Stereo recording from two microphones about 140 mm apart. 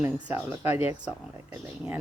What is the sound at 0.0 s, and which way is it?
Speech, 15° right (ahead or behind).